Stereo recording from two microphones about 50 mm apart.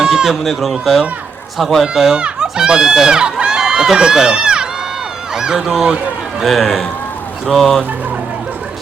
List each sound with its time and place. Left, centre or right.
0.0 s chicken: centre
0.4 s speech: centre
2.1 s speech: centre
6.4 s speech: centre